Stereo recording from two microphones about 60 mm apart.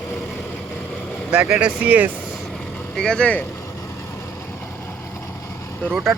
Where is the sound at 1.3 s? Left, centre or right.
Centre.